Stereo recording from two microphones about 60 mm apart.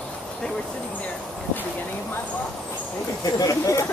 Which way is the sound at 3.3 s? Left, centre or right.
Left.